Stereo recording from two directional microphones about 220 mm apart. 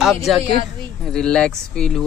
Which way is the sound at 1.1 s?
5° left (ahead or behind).